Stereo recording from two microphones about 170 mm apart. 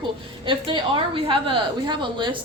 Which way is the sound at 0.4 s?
30° right (ahead or behind).